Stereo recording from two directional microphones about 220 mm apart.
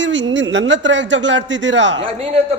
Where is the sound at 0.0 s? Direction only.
55° right (ahead or behind).